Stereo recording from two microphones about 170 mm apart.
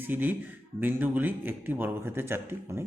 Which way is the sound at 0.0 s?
10° right (ahead or behind).